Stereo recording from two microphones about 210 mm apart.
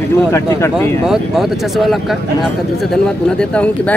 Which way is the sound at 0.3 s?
15° left (ahead or behind).